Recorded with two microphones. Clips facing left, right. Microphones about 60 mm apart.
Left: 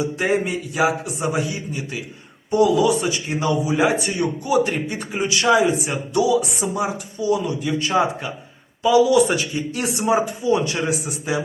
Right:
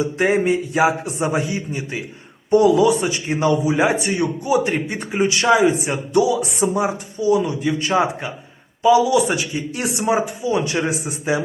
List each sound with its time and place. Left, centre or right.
0.2 s speech: right
5.1 s speech: centre
6.4 s speech: right; by 10.6 s centre
10.7 s speech: right